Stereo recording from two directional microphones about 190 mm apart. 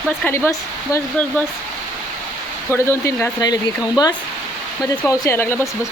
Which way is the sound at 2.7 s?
15° left (ahead or behind).